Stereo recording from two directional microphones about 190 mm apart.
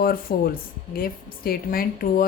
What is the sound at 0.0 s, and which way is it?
A woman's voice, 50° left (ahead or behind).